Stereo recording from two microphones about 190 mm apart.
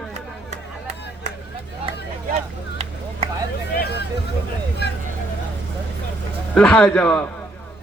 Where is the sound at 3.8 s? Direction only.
60° left (ahead or behind).